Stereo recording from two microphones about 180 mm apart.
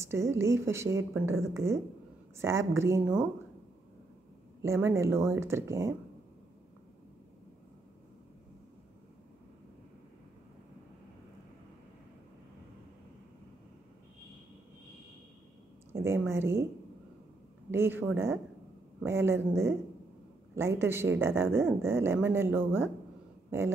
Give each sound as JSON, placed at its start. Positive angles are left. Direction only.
{"t": 0.0, "sound": "a woman's voice", "side_deg": -15}
{"t": 4.8, "sound": "a woman's voice", "side_deg": -15}
{"t": 15.9, "sound": "a woman's voice", "side_deg": -15}
{"t": 17.6, "sound": "a woman's voice", "side_deg": -10}